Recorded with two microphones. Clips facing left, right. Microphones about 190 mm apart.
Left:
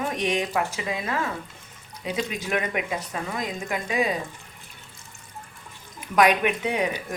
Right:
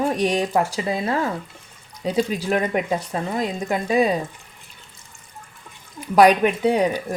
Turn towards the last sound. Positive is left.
turn(degrees=-35)  # may be behind; listen again after turning